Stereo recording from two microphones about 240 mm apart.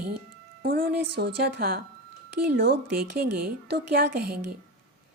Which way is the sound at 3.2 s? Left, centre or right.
Right.